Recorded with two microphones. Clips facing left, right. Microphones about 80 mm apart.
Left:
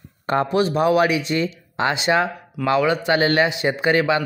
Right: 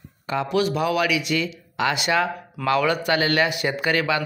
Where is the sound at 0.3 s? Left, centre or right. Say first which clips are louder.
Left 3 dB; left.